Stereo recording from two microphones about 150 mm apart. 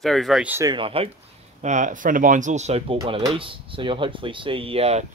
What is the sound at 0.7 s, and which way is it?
Speech, 35° right (ahead or behind).